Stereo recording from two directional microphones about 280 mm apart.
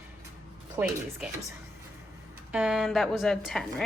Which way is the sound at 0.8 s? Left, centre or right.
Centre.